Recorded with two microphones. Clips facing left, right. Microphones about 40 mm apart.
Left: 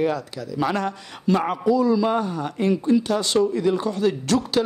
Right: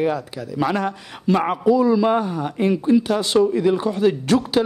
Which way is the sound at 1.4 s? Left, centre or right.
Right.